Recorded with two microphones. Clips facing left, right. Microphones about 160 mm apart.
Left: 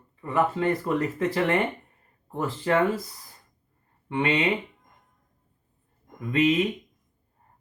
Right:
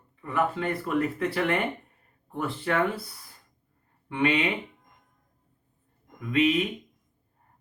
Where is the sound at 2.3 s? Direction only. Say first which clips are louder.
Left 4 dB; 35° left (ahead or behind).